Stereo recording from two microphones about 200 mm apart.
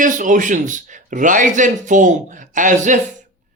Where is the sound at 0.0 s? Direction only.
40° right (ahead or behind).